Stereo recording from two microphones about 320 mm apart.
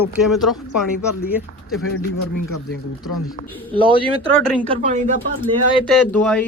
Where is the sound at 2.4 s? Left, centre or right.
Left.